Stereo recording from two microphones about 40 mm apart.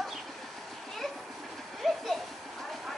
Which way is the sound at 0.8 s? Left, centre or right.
Centre.